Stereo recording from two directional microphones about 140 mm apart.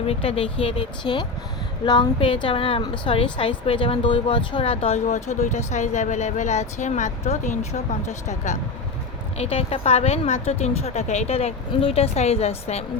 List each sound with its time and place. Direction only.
0.1 s speech: 45° left (ahead or behind)
5.0 s a woman's voice: 55° left (ahead or behind)